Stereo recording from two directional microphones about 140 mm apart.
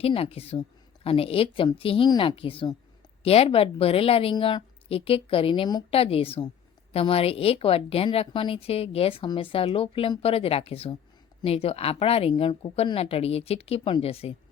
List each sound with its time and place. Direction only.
0.0 s a woman's voice: 40° left (ahead or behind)